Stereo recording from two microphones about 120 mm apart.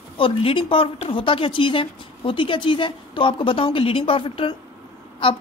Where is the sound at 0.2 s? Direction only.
50° left (ahead or behind).